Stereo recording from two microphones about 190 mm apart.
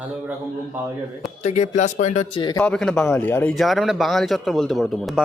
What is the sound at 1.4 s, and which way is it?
Speech, 35° left (ahead or behind).